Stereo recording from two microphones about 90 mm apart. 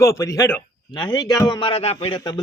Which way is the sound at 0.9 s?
50° left (ahead or behind).